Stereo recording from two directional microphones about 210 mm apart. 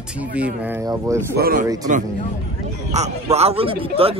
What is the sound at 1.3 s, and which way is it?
Speech, 45° right (ahead or behind).